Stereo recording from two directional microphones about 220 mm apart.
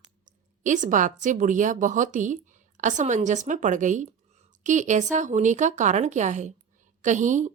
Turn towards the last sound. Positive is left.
turn(degrees=-35)  # may be behind; listen again after turning